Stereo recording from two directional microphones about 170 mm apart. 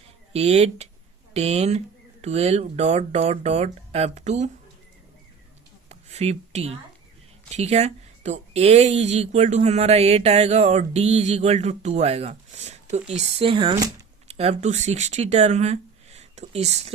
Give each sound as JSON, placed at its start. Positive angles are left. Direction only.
{"t": 0.3, "sound": "speech", "side_deg": -40}
{"t": 5.9, "sound": "a sound", "side_deg": -40}
{"t": 7.5, "sound": "speech", "side_deg": -40}